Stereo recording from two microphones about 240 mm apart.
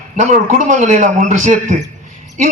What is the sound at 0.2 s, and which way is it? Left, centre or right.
A man's voice, right.